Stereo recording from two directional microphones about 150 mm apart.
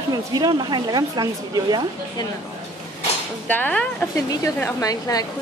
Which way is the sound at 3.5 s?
10° left (ahead or behind).